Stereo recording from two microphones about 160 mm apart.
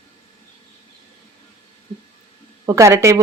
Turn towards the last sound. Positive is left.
turn(degrees=-20)  # may be behind; listen again after turning